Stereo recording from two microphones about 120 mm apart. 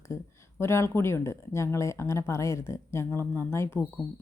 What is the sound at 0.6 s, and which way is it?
A woman's voice, 20° left (ahead or behind).